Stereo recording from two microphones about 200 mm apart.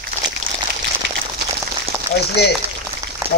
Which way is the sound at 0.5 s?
45° right (ahead or behind).